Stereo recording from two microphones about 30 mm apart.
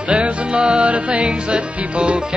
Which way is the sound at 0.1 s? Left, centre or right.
Right.